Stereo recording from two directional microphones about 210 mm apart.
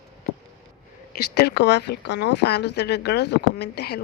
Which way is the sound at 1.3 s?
55° left (ahead or behind).